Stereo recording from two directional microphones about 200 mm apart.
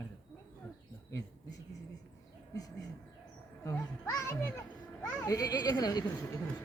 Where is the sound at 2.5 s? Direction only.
20° left (ahead or behind).